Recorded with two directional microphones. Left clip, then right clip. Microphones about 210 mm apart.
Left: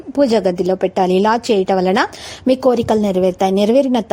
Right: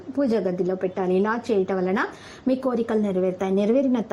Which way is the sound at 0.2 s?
40° left (ahead or behind).